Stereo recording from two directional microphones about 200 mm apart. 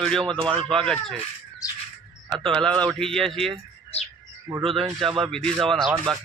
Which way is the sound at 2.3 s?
25° right (ahead or behind).